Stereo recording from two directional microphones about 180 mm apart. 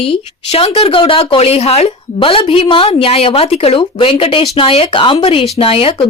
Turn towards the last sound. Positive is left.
turn(degrees=30)  # may be behind; listen again after turning